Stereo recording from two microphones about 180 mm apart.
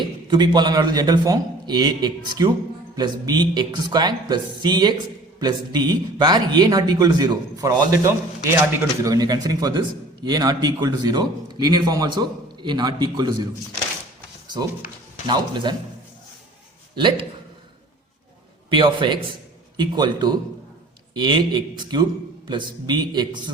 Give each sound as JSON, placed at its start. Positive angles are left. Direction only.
{"t": 0.0, "sound": "a man's voice", "side_deg": -25}
{"t": 15.3, "sound": "a man's voice", "side_deg": -25}
{"t": 16.9, "sound": "a man's voice", "side_deg": -25}
{"t": 18.7, "sound": "a man's voice", "side_deg": -25}